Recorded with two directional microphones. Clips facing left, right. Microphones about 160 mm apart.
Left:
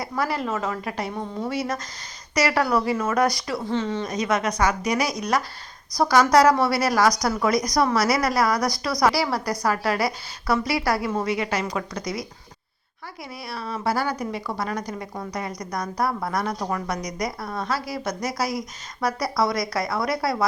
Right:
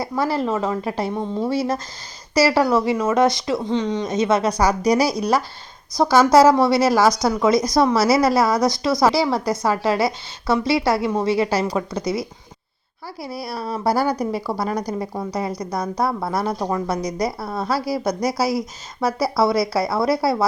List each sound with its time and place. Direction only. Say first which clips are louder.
0.0 s a woman's voice: right 5 dB; 30° right (ahead or behind)
13.2 s a woman's voice: right 6 dB; 35° right (ahead or behind)